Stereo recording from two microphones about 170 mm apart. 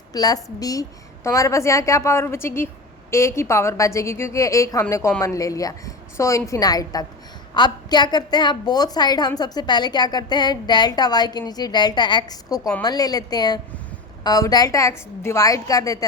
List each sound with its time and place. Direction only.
0.1 s a woman's voice: 20° left (ahead or behind)